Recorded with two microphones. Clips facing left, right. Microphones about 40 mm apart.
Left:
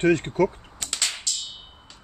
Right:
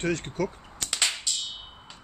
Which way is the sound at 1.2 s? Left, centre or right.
Centre.